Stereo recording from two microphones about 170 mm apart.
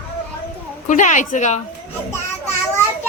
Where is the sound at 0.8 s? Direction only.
45° left (ahead or behind).